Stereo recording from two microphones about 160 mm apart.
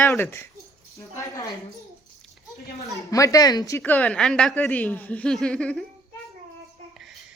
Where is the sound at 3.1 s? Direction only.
20° left (ahead or behind).